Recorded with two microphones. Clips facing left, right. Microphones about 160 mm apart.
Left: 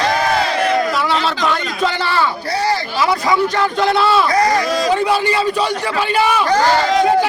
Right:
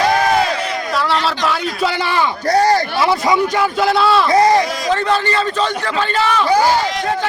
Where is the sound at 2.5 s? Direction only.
45° right (ahead or behind).